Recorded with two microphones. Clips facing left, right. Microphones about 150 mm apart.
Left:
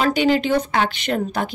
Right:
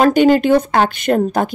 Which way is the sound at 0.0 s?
50° right (ahead or behind).